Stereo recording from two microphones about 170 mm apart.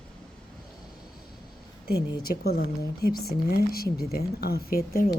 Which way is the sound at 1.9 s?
65° left (ahead or behind).